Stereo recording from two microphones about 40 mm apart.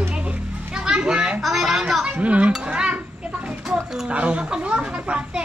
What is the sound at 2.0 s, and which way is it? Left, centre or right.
Speech, right.